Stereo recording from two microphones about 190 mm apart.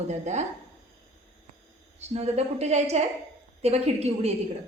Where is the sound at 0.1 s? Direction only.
35° right (ahead or behind).